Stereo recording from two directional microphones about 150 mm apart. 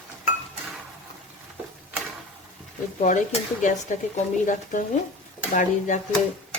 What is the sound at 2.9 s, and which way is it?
Speech, 55° left (ahead or behind).